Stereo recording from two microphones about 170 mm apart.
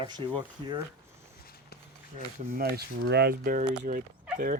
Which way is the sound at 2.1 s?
60° right (ahead or behind).